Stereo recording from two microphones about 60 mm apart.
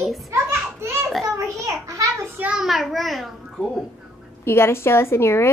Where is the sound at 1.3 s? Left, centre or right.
Right.